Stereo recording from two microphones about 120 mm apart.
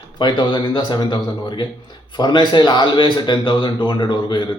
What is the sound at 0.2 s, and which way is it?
A man's voice, 40° left (ahead or behind).